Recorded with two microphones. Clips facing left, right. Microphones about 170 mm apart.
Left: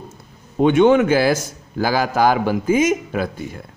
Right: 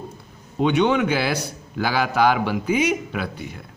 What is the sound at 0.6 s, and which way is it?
A man's voice, 45° left (ahead or behind).